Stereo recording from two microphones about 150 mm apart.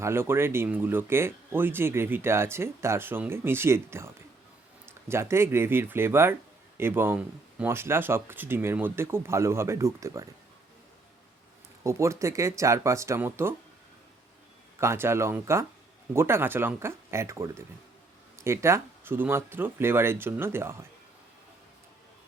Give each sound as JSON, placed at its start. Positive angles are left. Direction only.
{"t": 0.0, "sound": "speech", "side_deg": -15}
{"t": 11.8, "sound": "speech", "side_deg": -20}
{"t": 14.8, "sound": "speech", "side_deg": -15}